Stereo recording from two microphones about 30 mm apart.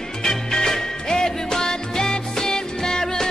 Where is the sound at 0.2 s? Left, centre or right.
Centre.